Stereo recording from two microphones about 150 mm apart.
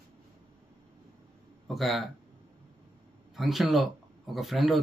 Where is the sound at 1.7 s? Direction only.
Centre (ahead or behind).